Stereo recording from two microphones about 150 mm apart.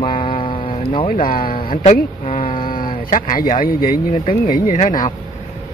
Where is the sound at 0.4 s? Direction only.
35° left (ahead or behind).